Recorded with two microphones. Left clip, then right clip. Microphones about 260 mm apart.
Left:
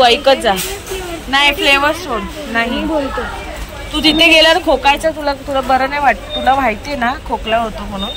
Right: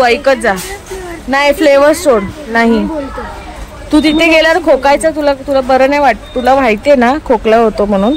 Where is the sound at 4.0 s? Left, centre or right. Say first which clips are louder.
Right 1 dB; centre.